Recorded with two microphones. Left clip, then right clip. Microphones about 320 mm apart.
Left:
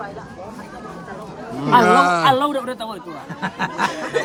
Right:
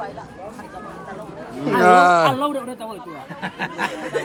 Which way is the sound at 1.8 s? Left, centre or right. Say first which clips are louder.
Right 5 dB; centre.